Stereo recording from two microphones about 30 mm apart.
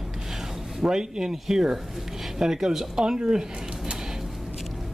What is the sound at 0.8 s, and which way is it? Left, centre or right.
A woman's voice, right.